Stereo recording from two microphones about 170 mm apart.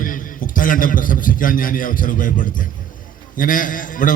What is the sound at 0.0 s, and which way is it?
A man's voice, 55° left (ahead or behind).